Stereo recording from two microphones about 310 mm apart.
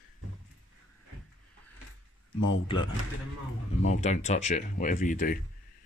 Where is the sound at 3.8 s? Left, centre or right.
Left.